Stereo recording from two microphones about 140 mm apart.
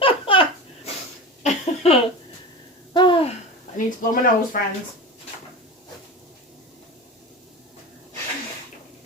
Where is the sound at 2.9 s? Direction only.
35° left (ahead or behind).